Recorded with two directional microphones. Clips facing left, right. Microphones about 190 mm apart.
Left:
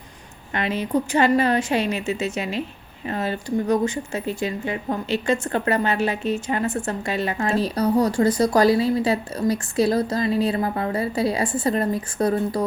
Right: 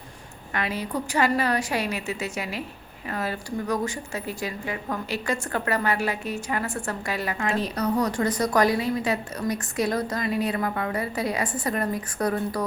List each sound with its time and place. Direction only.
0.5 s speech: 25° left (ahead or behind)